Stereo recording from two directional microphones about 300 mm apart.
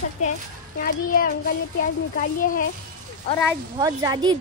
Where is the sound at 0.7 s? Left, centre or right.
Left.